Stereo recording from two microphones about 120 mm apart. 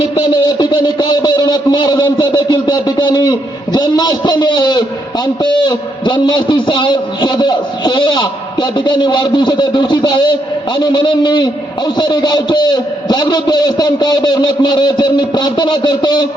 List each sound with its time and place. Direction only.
0.6 s a man's voice: 40° left (ahead or behind)